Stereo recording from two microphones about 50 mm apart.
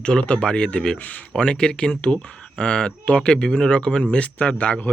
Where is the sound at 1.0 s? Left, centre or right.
Left.